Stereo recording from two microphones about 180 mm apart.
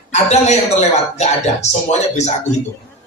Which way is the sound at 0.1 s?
40° left (ahead or behind).